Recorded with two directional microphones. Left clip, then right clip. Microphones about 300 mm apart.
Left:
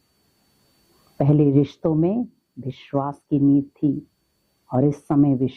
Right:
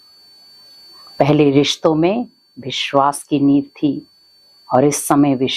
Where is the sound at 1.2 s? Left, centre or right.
Centre.